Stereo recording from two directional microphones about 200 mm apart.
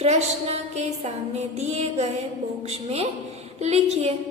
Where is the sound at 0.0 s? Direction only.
30° right (ahead or behind).